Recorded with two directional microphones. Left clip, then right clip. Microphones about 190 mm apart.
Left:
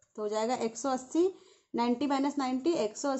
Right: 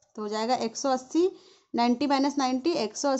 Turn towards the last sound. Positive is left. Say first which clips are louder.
# right 3 dB
turn(degrees=-40)  # may be behind; listen again after turning